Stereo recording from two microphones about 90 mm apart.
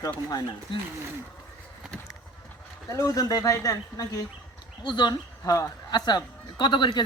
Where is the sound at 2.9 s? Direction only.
40° left (ahead or behind).